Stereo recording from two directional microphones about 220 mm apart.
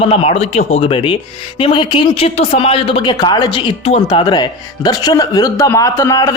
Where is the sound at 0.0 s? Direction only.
25° left (ahead or behind).